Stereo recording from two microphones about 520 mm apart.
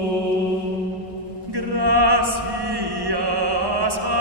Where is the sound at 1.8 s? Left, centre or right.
Right.